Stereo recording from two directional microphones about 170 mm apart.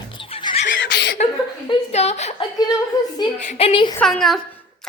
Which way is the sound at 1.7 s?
40° left (ahead or behind).